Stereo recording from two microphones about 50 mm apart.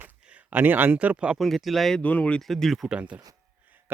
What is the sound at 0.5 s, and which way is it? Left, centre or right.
Speech, right.